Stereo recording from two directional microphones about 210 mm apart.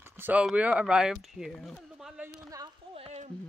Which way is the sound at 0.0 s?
10° right (ahead or behind).